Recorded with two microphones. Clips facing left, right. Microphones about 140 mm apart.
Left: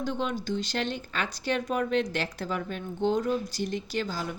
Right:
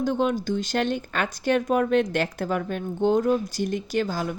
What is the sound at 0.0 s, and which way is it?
Speech, 50° right (ahead or behind).